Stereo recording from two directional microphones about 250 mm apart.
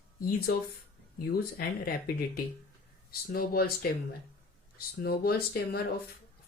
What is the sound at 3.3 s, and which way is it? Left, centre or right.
Speech, left.